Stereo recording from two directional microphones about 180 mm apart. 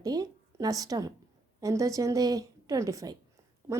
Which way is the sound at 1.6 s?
20° right (ahead or behind).